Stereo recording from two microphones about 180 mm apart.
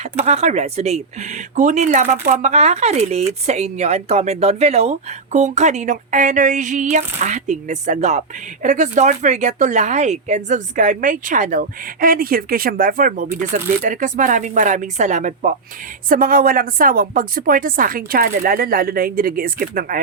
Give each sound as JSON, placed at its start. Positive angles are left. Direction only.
{"t": 0.0, "sound": "speech", "side_deg": -35}